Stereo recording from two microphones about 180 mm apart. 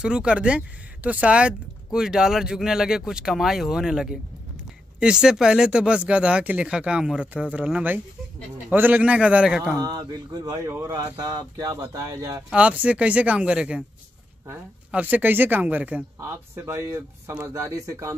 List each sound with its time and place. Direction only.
0.0 s speech: 5° right (ahead or behind)
9.8 s speech: 20° right (ahead or behind)
12.4 s speech: 5° right (ahead or behind)